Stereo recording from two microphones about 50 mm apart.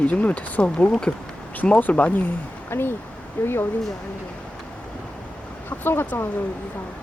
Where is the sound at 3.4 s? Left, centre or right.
Left.